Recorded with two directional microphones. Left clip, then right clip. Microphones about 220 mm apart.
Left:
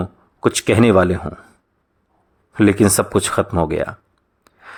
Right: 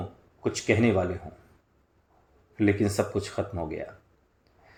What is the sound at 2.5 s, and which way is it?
Speech, 35° left (ahead or behind).